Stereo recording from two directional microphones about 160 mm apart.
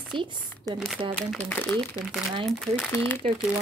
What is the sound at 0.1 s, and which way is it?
Speech, 30° right (ahead or behind).